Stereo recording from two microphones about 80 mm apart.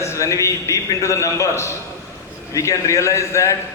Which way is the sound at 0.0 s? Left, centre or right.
Left.